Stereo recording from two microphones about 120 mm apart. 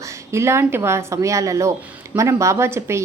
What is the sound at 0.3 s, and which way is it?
A woman's voice, 20° right (ahead or behind).